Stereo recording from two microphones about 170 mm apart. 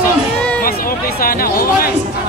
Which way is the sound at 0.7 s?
60° left (ahead or behind).